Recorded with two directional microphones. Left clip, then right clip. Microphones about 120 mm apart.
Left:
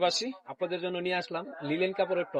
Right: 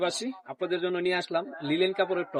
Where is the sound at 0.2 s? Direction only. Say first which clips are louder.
Even; 25° right (ahead or behind).